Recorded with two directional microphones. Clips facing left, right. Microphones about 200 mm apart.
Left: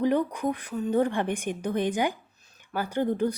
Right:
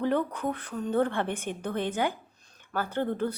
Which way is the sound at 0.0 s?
15° left (ahead or behind).